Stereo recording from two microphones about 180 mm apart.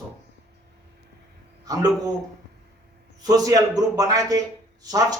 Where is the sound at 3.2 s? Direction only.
20° right (ahead or behind).